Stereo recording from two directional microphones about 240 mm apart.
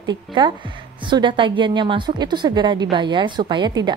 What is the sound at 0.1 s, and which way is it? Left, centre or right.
A woman's voice, centre.